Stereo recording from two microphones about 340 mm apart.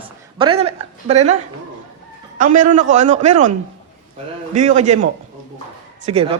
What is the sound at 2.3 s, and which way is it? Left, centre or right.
A man's voice, right.